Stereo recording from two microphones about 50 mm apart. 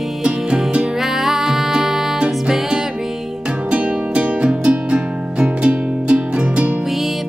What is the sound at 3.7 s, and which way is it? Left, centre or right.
Music, right.